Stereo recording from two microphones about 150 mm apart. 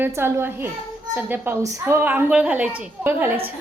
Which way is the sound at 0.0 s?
15° right (ahead or behind).